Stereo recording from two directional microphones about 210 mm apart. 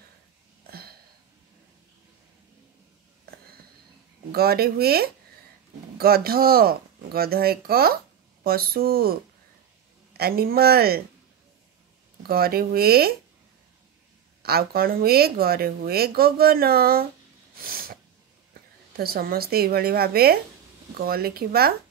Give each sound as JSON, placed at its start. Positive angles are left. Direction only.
{"t": 0.7, "sound": "a sound", "side_deg": -45}
{"t": 4.3, "sound": "speech", "side_deg": -50}
{"t": 12.2, "sound": "speech", "side_deg": -45}
{"t": 14.4, "sound": "speech", "side_deg": -45}
{"t": 17.6, "sound": "a sound", "side_deg": -45}
{"t": 18.5, "sound": "a woman's voice", "side_deg": -45}